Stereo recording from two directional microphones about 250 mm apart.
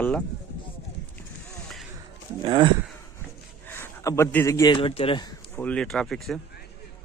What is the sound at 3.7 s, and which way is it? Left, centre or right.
A man's voice, centre.